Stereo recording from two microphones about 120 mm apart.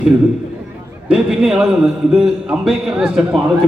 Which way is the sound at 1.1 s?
5° right (ahead or behind).